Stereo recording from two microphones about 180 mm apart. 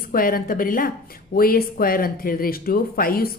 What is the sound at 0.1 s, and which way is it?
Speech, 50° left (ahead or behind).